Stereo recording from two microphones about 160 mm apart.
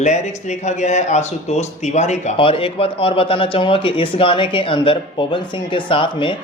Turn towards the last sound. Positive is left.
turn(degrees=30)  # may be behind; listen again after turning